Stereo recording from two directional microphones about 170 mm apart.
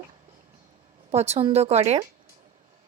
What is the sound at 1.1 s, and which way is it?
Speech, 40° right (ahead or behind).